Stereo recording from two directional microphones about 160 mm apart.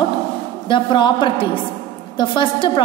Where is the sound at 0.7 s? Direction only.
30° left (ahead or behind).